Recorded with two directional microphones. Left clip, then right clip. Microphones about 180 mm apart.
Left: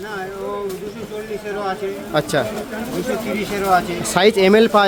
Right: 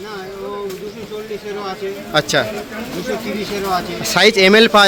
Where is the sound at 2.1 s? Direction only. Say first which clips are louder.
Right 3 dB; 5° left (ahead or behind).